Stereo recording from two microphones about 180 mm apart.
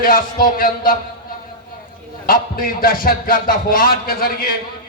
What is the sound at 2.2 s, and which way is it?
Music, 55° left (ahead or behind).